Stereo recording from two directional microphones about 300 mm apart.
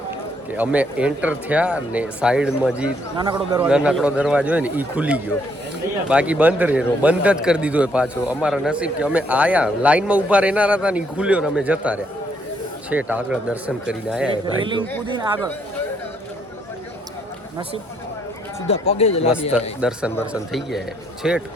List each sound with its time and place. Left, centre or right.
0.5 s a man's voice: centre
14.6 s speech: centre
18.7 s speech: centre
19.8 s a man's voice: centre